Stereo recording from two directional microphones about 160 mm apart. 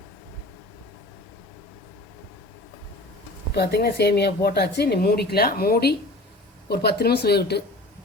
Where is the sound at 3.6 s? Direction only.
90° left.